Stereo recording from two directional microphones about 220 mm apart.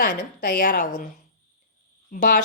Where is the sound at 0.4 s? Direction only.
40° left (ahead or behind).